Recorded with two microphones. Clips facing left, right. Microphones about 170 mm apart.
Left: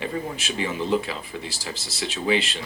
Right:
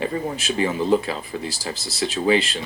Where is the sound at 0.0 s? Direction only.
40° right (ahead or behind).